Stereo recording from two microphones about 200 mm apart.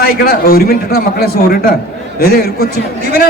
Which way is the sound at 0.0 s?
50° left (ahead or behind).